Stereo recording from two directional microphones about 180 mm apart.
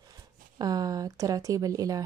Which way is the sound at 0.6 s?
20° right (ahead or behind).